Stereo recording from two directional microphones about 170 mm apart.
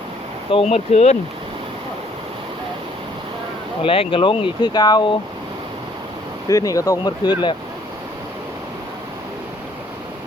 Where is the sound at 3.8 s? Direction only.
35° left (ahead or behind).